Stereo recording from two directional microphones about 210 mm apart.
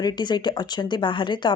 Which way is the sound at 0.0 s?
20° left (ahead or behind).